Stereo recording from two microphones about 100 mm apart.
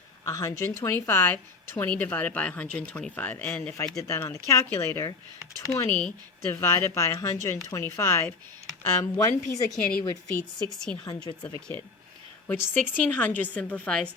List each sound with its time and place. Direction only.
0.3 s a woman's voice: 35° left (ahead or behind)
5.9 s a woman's voice: 10° left (ahead or behind)
6.5 s speech: 25° left (ahead or behind)
9.6 s speech: 5° left (ahead or behind)
11.3 s speech: 45° left (ahead or behind)
12.5 s a woman's voice: 20° left (ahead or behind)